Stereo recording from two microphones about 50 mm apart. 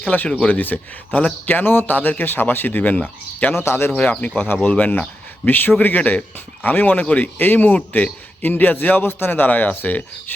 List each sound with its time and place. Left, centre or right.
0.0 s speech: left
3.5 s speech: left
3.9 s speech: left
5.5 s speech: left
6.0 s speech: left
7.3 s speech: left